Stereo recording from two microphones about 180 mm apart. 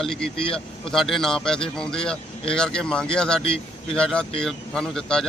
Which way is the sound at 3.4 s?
30° left (ahead or behind).